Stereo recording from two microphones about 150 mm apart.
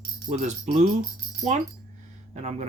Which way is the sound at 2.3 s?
50° right (ahead or behind).